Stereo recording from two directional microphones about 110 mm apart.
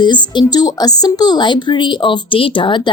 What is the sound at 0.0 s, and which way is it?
A woman's voice, 45° left (ahead or behind).